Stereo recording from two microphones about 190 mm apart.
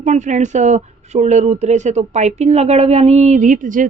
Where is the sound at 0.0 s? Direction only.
40° right (ahead or behind).